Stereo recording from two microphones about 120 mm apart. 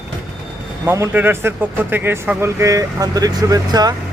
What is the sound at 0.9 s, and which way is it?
Speech, 20° right (ahead or behind).